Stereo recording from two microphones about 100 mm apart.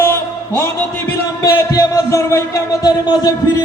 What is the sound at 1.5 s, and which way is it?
Speech, 35° left (ahead or behind).